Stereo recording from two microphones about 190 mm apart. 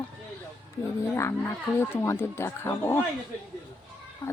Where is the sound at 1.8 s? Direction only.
15° left (ahead or behind).